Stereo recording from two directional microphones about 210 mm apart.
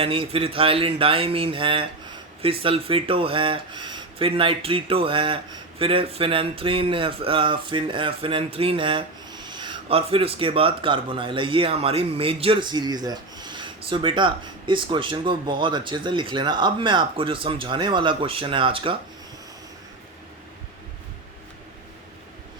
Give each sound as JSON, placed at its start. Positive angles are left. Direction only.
{"t": 0.0, "sound": "speech", "side_deg": -25}